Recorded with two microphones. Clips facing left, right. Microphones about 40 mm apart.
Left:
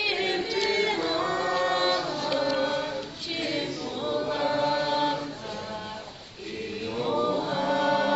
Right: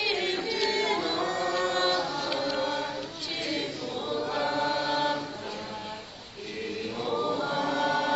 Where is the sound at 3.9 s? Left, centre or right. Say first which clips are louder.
Left 2 dB; centre.